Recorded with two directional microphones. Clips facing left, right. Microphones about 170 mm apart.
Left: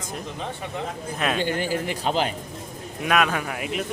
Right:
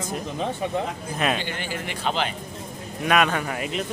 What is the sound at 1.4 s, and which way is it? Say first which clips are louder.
Speech: left 6 dB; 40° left (ahead or behind).